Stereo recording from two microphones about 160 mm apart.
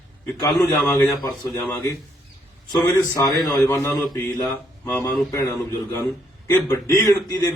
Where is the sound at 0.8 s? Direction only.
15° left (ahead or behind).